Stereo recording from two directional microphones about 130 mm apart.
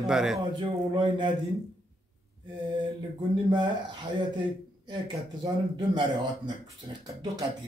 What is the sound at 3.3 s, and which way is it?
Speech, 35° right (ahead or behind).